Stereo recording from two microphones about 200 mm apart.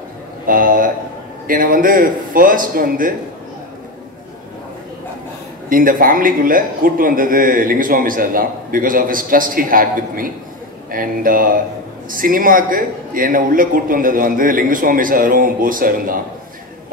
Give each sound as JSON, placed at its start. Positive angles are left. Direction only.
{"t": 0.5, "sound": "a man's voice", "side_deg": -45}
{"t": 5.7, "sound": "a man's voice", "side_deg": -45}